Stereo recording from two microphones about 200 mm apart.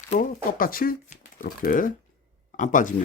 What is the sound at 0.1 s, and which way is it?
Speech, 45° left (ahead or behind).